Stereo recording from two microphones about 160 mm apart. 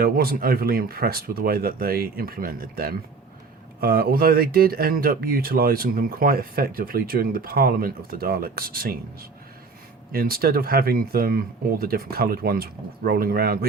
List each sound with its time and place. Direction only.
0.0 s speech: 70° right (ahead or behind)
10.1 s speech: 70° right (ahead or behind)